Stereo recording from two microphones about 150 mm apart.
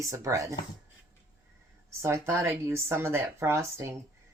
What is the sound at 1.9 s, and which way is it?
Speech, 20° right (ahead or behind).